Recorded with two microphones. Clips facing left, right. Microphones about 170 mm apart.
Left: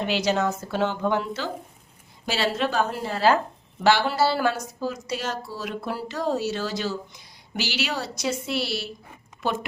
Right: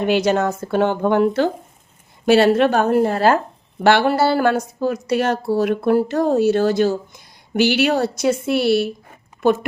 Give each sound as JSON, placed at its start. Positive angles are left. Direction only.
{"t": 0.0, "sound": "speech", "side_deg": -55}